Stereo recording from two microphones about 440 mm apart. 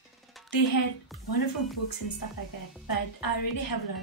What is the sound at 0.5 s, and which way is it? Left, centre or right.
Speech, left.